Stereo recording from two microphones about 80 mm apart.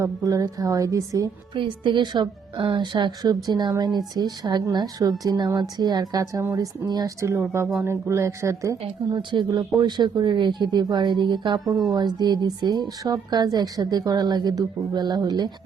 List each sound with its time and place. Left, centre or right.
0.0 s a woman's voice: right
1.5 s a woman's voice: right
7.2 s speech: right
9.1 s speech: right
9.5 s speech: right
11.6 s speech: centre
11.9 s a woman's voice: right